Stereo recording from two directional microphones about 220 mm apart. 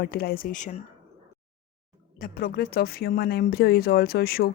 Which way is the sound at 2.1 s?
40° left (ahead or behind).